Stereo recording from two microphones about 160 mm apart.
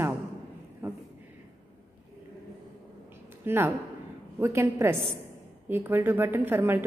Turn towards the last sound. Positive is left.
turn(degrees=-15)  # may be behind; listen again after turning